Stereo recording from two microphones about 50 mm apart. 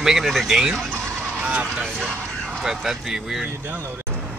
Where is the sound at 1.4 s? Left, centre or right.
Right.